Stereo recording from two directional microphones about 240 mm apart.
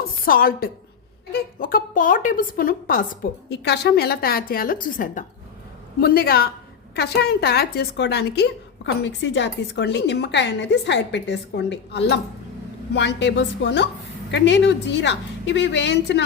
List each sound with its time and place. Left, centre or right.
0.3 s a woman's voice: left